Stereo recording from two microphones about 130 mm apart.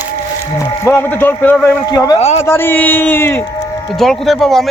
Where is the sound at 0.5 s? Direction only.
20° left (ahead or behind).